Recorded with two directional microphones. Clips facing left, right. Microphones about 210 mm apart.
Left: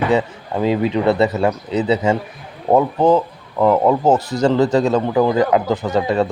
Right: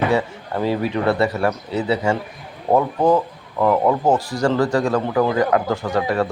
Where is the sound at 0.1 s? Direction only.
20° left (ahead or behind).